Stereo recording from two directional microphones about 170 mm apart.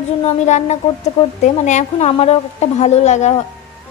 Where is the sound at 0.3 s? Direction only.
40° left (ahead or behind).